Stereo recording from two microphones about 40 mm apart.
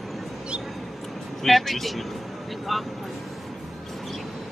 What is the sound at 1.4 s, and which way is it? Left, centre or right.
Speech, centre.